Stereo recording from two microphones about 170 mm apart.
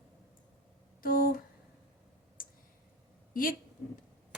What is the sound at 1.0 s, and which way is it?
Speech, 55° left (ahead or behind).